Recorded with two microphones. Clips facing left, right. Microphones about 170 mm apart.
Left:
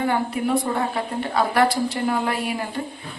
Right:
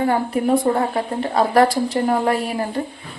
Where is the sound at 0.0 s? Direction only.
40° right (ahead or behind).